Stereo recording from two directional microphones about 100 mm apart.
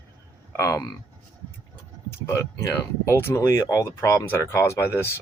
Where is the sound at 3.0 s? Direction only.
25° left (ahead or behind).